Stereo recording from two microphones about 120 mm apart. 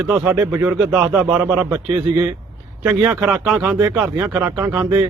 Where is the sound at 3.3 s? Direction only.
10° right (ahead or behind).